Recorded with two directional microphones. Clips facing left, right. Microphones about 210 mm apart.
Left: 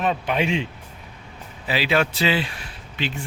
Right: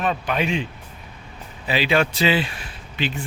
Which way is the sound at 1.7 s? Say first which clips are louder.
Right 1 dB; 5° left (ahead or behind).